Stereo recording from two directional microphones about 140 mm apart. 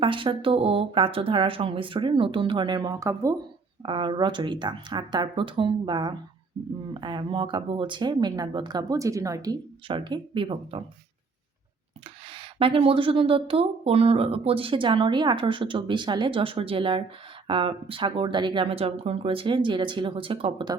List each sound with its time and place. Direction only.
0.0 s speech: 35° right (ahead or behind)
3.8 s speech: 35° right (ahead or behind)
12.3 s speech: 40° right (ahead or behind)